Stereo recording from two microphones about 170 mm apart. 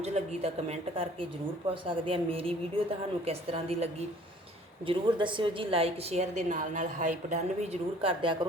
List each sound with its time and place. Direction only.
0.0 s a woman's voice: 40° right (ahead or behind)
4.9 s a woman's voice: 30° right (ahead or behind)